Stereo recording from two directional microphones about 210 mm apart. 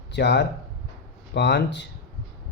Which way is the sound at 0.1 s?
55° left (ahead or behind).